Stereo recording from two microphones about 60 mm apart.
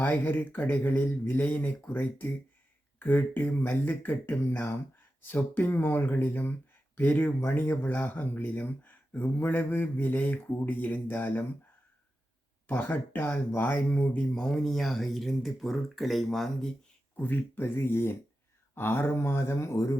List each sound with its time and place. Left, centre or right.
0.0 s speech: left
12.6 s speech: left
14.3 s speech: centre
17.2 s speech: left